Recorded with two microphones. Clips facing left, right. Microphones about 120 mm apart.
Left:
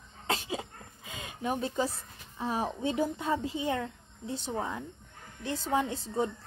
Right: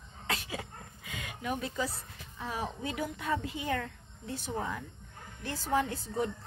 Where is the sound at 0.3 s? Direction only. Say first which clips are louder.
Left 4 dB; 25° left (ahead or behind).